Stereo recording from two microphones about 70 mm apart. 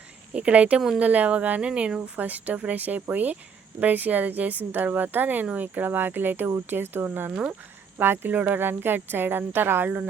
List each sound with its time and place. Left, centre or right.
0.3 s speech: centre